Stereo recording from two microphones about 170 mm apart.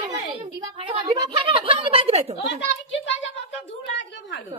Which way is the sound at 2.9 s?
90° left.